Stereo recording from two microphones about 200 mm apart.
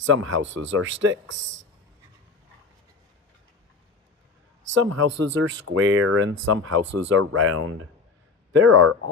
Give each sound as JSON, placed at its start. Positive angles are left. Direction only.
{"t": 0.0, "sound": "speech", "side_deg": -75}
{"t": 4.7, "sound": "speech", "side_deg": -75}